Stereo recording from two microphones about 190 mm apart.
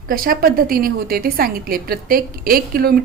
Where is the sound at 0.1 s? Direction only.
50° right (ahead or behind).